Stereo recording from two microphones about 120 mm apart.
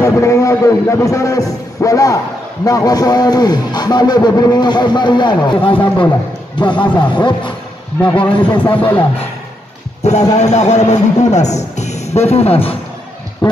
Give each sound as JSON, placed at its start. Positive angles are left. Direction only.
{"t": 0.0, "sound": "a man's voice", "side_deg": 25}
{"t": 8.0, "sound": "speech", "side_deg": 10}
{"t": 8.3, "sound": "speech", "side_deg": 45}
{"t": 8.6, "sound": "speech", "side_deg": 15}
{"t": 10.3, "sound": "a man's voice", "side_deg": 70}